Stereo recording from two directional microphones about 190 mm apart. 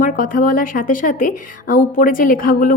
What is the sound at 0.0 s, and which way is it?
A woman's voice, 45° left (ahead or behind).